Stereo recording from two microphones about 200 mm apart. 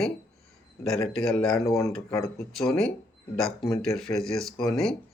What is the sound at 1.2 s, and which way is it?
Speech, 5° left (ahead or behind).